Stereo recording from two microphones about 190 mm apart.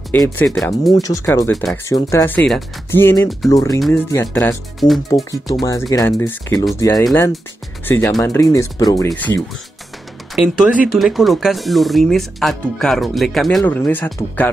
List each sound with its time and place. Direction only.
0.1 s speech: 10° left (ahead or behind)
1.0 s speech: 15° left (ahead or behind)
1.5 s speech: centre (ahead or behind)
1.9 s speech: 15° left (ahead or behind)
4.7 s speech: centre (ahead or behind)
5.5 s speech: 15° left (ahead or behind)
8.2 s speech: 15° left (ahead or behind)
10.3 s speech: 5° right (ahead or behind)